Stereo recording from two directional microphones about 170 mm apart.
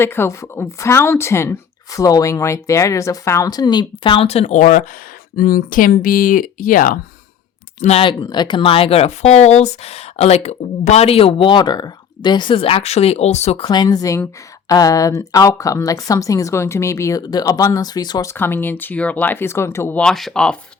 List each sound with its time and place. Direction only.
0.0 s speech: 15° left (ahead or behind); by 6.9 s 55° left (ahead or behind)
7.8 s speech: 35° left (ahead or behind)
13.7 s speech: 25° left (ahead or behind); by 20.6 s 5° left (ahead or behind)